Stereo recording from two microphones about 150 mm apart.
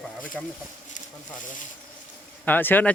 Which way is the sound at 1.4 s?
60° left (ahead or behind).